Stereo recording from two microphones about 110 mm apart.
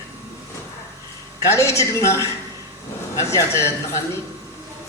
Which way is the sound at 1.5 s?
25° left (ahead or behind).